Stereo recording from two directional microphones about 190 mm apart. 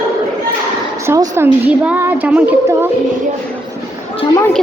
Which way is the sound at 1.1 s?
10° right (ahead or behind).